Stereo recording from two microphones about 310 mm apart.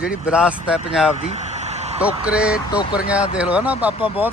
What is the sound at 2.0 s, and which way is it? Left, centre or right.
Speech, centre.